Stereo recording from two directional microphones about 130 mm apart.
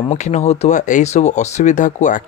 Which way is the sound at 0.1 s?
60° left (ahead or behind).